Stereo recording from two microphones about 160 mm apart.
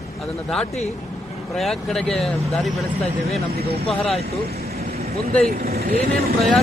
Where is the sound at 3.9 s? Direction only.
5° left (ahead or behind).